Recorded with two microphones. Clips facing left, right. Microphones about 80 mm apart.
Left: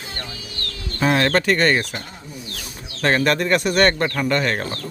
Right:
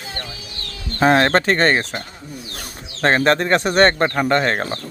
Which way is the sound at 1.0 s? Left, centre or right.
Right.